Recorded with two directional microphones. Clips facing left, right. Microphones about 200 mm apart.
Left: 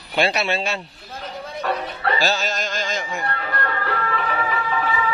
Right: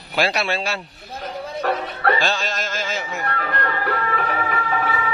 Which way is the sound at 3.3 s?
50° right (ahead or behind).